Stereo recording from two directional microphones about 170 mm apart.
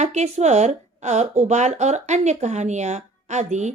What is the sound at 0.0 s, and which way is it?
A woman's voice, 40° right (ahead or behind).